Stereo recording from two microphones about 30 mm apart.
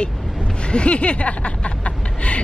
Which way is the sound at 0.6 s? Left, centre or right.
Left.